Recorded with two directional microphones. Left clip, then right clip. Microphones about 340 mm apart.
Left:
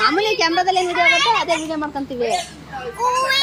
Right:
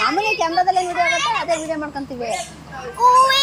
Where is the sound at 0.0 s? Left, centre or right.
Centre.